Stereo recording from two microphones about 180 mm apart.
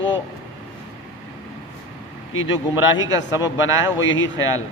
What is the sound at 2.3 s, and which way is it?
Speech, 90° left.